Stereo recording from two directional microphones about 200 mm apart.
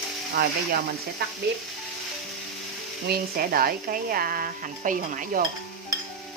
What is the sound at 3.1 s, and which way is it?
Speech, 50° right (ahead or behind).